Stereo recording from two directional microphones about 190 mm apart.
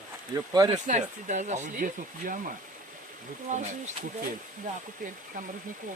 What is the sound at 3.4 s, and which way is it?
Speech, 40° right (ahead or behind).